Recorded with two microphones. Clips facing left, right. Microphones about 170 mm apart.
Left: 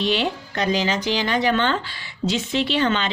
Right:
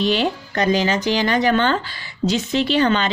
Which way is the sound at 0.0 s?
45° right (ahead or behind).